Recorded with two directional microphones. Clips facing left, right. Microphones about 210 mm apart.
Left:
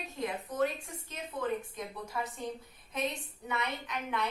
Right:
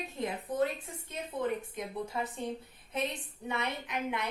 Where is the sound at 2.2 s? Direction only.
25° right (ahead or behind).